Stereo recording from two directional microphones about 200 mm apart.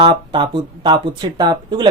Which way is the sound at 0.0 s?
25° right (ahead or behind).